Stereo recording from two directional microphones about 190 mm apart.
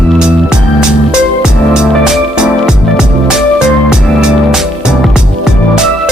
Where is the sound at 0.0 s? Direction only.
Centre (ahead or behind).